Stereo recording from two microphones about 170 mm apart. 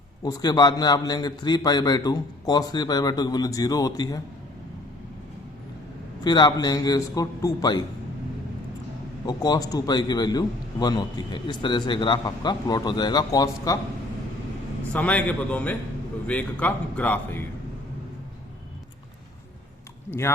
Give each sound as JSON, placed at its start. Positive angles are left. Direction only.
{"t": 0.2, "sound": "a man's voice", "side_deg": 20}
{"t": 6.2, "sound": "a man's voice", "side_deg": 25}
{"t": 9.2, "sound": "a man's voice", "side_deg": 25}
{"t": 14.9, "sound": "speech", "side_deg": 10}
{"t": 20.1, "sound": "speech", "side_deg": 15}